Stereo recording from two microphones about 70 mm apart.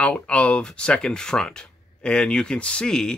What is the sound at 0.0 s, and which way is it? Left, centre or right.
Speech, centre.